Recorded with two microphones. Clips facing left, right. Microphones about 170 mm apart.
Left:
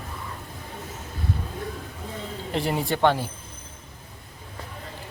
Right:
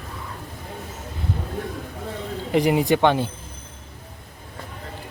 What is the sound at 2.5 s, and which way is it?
Speech, 15° right (ahead or behind).